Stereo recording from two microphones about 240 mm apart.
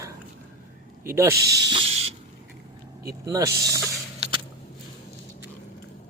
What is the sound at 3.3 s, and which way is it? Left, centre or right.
Speech, centre.